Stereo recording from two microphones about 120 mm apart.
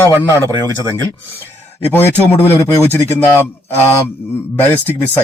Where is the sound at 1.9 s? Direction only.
15° left (ahead or behind).